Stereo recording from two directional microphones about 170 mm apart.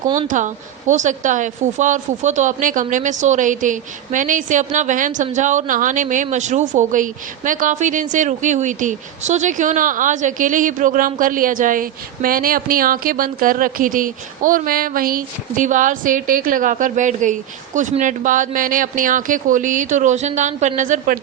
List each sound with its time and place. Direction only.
0.2 s speech: 45° right (ahead or behind)